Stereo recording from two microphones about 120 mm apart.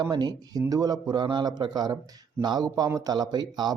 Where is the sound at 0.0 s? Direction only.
35° right (ahead or behind).